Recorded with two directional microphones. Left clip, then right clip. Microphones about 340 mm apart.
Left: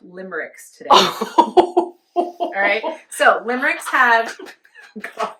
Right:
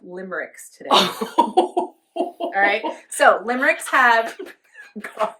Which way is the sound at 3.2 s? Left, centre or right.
Centre.